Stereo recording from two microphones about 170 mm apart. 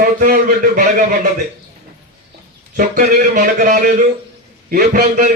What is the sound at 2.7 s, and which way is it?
A man's voice, 55° right (ahead or behind).